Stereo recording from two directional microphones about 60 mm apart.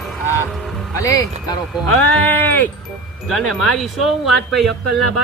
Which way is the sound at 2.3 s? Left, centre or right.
Left.